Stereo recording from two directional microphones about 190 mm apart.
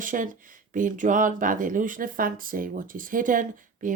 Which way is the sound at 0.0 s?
45° right (ahead or behind).